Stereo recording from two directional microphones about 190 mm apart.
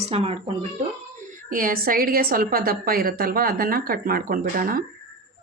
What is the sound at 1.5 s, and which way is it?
A woman's voice, 45° right (ahead or behind).